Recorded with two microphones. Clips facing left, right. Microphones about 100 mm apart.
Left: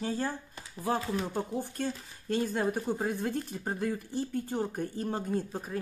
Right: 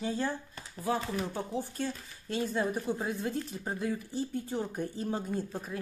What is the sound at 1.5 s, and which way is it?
Speech, 50° left (ahead or behind).